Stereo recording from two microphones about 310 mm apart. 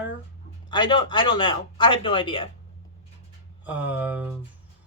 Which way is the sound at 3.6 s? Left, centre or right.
Centre.